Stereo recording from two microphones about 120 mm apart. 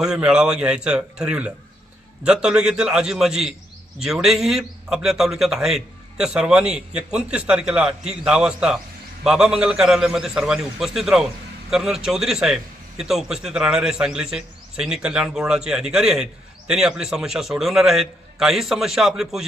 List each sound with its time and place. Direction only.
0.0 s a man's voice: 5° right (ahead or behind)